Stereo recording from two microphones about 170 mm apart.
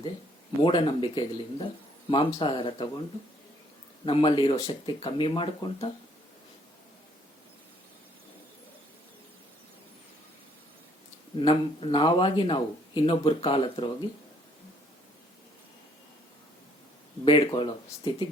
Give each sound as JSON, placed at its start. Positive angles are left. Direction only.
{"t": 0.6, "sound": "speech", "side_deg": 30}
{"t": 4.0, "sound": "speech", "side_deg": 30}
{"t": 11.3, "sound": "speech", "side_deg": 30}
{"t": 17.2, "sound": "speech", "side_deg": 30}